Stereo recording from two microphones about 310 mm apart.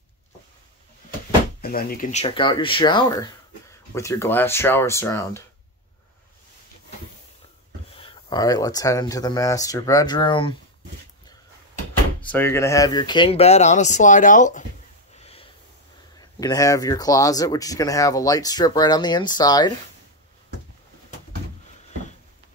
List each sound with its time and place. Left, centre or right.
1.6 s speech: left; by 5.4 s centre
7.9 s speech: centre
12.3 s speech: centre; by 14.6 s left
15.1 s snort: centre
16.2 s speech: centre